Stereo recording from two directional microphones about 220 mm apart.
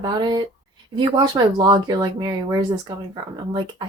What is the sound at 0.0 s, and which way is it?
Speech, 20° right (ahead or behind).